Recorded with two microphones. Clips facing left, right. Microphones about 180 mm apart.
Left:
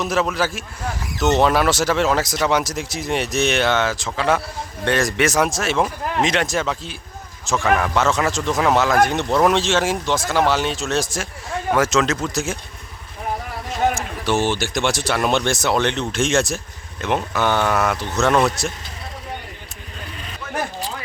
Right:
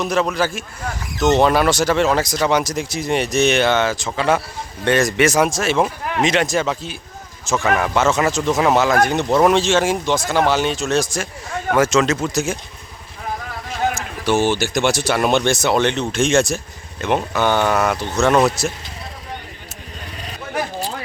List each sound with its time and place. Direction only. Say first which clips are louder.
0.0 s speech: right 2 dB; centre (ahead or behind)
13.9 s speech: right 2 dB; centre (ahead or behind)